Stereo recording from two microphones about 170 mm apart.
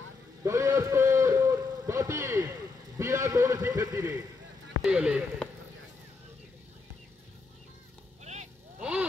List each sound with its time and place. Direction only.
0.4 s a sound: 15° right (ahead or behind)
4.8 s speech: 5° right (ahead or behind)
8.2 s vehicle: 45° right (ahead or behind)